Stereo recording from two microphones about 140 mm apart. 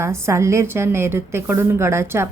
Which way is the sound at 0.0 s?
20° right (ahead or behind).